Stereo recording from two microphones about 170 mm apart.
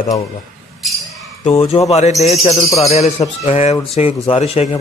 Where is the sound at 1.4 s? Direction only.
35° left (ahead or behind).